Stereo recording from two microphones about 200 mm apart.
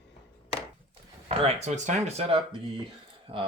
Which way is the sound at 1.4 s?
35° right (ahead or behind).